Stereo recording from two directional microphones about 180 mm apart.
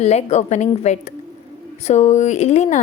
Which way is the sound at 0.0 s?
40° left (ahead or behind).